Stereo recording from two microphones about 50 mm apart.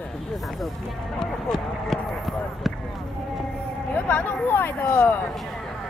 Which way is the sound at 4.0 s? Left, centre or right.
Left.